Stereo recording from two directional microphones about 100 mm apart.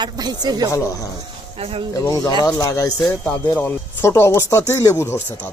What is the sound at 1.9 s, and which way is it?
Speech, 35° left (ahead or behind).